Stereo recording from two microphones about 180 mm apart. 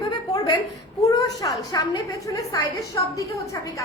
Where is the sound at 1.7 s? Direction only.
20° left (ahead or behind).